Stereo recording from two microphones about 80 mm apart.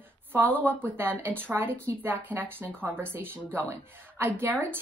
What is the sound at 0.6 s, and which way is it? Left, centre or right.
Speech, right.